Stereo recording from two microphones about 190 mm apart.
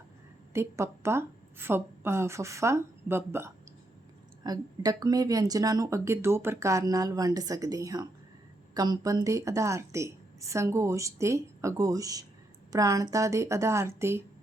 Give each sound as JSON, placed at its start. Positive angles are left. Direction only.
{"t": 0.5, "sound": "a woman's voice", "side_deg": -15}